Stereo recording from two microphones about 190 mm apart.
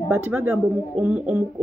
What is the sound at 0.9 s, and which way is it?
Speech, 5° right (ahead or behind).